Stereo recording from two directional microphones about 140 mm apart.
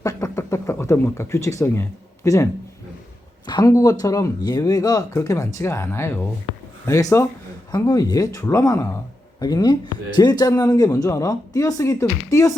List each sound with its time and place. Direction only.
0.0 s speech: 25° left (ahead or behind)